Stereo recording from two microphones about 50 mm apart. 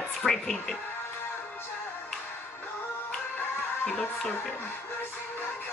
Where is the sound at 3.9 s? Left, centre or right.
Centre.